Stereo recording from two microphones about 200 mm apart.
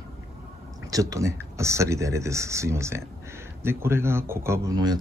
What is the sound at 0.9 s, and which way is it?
Speech, 15° right (ahead or behind).